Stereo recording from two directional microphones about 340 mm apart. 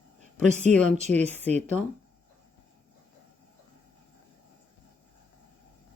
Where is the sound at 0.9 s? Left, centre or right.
Right.